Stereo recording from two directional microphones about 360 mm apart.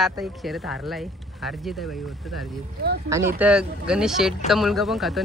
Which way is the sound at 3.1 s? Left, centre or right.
Centre.